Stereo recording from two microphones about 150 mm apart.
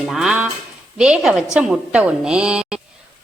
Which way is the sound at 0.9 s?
5° right (ahead or behind).